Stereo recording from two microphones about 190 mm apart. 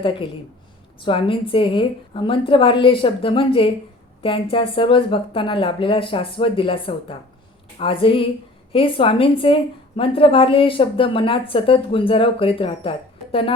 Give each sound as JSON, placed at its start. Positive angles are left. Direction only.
{"t": 0.0, "sound": "a woman's voice", "side_deg": 25}